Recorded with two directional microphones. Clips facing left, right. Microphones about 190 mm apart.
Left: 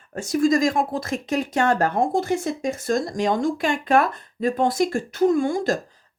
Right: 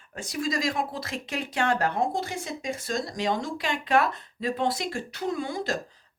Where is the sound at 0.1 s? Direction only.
45° left (ahead or behind).